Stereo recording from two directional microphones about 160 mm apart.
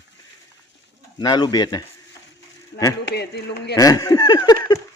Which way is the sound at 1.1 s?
25° left (ahead or behind).